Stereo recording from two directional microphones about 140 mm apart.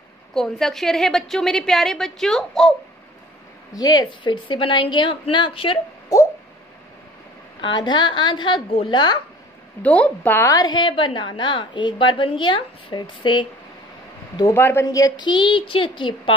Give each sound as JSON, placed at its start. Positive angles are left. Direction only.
{"t": 0.3, "sound": "a woman's voice", "side_deg": 5}
{"t": 3.7, "sound": "a woman's voice", "side_deg": 30}
{"t": 6.1, "sound": "a sound", "side_deg": 25}
{"t": 7.6, "sound": "a woman's voice", "side_deg": 35}
{"t": 9.8, "sound": "a woman's voice", "side_deg": 10}
{"t": 14.3, "sound": "a woman's voice", "side_deg": 20}